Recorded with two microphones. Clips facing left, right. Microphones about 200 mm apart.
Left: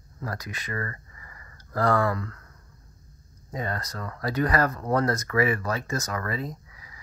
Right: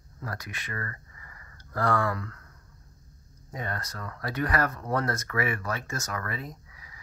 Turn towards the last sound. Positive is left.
turn(degrees=35)  # may be behind; listen again after turning